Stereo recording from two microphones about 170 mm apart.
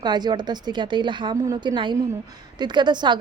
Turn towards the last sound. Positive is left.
turn(degrees=-25)  # may be behind; listen again after turning